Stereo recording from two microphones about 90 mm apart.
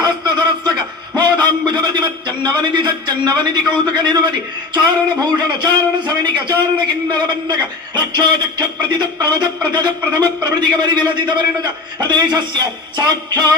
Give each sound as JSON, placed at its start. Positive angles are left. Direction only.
{"t": 0.0, "sound": "a sound", "side_deg": -55}
{"t": 1.1, "sound": "music", "side_deg": -55}
{"t": 2.7, "sound": "a man's voice", "side_deg": -55}
{"t": 10.2, "sound": "music", "side_deg": -50}